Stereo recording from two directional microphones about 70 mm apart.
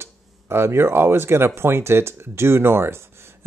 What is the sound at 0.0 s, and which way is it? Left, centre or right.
Speech, right.